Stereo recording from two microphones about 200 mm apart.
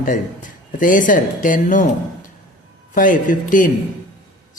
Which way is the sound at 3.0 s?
40° left (ahead or behind).